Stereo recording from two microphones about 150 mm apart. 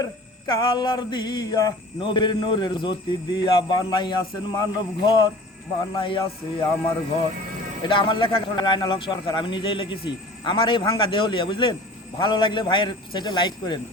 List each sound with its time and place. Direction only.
0.0 s mantra: 35° left (ahead or behind)
7.9 s mantra: 35° left (ahead or behind)